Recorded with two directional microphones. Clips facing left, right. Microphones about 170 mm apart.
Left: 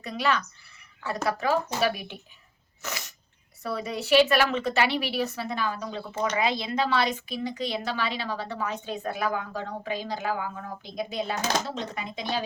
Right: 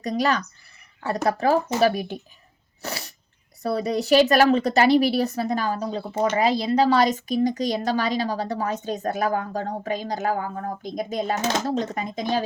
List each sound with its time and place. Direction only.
0.0 s a woman's voice: 40° right (ahead or behind)
2.8 s sneeze: 35° right (ahead or behind)
3.6 s a woman's voice: 40° right (ahead or behind)